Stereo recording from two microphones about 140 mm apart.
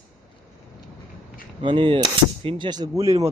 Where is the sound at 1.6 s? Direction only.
35° right (ahead or behind).